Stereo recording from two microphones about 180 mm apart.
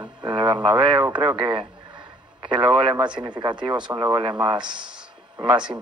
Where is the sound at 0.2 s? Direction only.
25° right (ahead or behind).